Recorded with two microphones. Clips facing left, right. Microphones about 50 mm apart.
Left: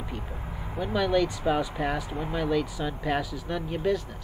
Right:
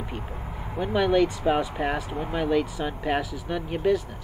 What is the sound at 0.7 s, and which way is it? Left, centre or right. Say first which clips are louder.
Speech: right 3 dB; right.